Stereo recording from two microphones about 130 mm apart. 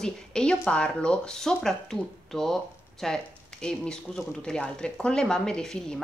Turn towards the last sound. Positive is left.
turn(degrees=5)  # may be behind; listen again after turning